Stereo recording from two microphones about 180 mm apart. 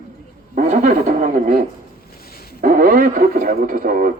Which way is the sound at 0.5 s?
45° right (ahead or behind).